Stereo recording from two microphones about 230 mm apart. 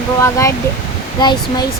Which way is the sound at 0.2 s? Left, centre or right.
Centre.